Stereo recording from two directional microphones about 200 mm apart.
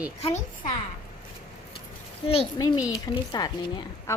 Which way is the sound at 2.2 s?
30° left (ahead or behind).